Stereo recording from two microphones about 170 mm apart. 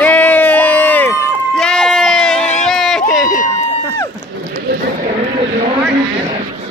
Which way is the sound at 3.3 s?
50° left (ahead or behind).